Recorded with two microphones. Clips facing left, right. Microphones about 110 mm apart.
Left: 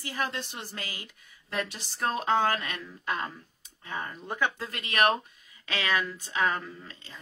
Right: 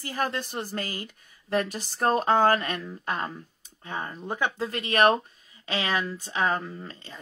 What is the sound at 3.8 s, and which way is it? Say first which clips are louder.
Speech: right 3 dB; 30° right (ahead or behind).